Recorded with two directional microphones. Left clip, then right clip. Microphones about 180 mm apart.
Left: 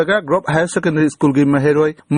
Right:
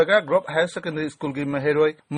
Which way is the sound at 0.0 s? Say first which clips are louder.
Left 3 dB; 30° left (ahead or behind).